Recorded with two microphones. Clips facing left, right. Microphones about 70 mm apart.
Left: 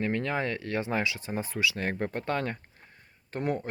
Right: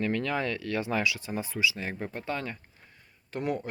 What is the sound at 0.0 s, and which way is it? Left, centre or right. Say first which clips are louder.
Speech: even; left.